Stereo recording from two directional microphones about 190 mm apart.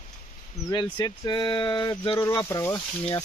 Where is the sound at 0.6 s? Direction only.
20° left (ahead or behind).